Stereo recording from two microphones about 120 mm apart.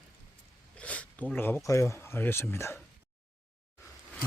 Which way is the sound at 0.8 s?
10° left (ahead or behind).